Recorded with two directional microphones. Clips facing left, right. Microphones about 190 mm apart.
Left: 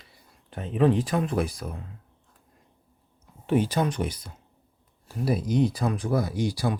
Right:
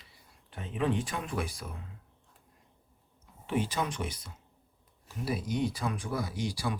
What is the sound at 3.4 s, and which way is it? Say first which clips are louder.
Speech: left 8 dB; 40° left (ahead or behind).